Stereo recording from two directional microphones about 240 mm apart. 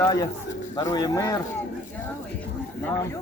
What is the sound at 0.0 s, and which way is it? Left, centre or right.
Speech, centre.